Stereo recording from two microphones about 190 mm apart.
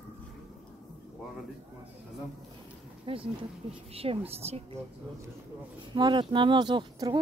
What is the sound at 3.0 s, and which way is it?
A woman's voice, 30° right (ahead or behind).